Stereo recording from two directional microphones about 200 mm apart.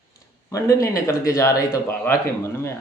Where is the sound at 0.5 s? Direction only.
15° left (ahead or behind).